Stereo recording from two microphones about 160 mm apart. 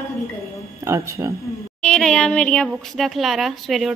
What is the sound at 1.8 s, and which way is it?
Speech, 5° left (ahead or behind).